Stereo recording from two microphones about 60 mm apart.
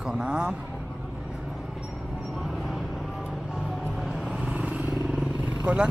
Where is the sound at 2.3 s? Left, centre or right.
Centre.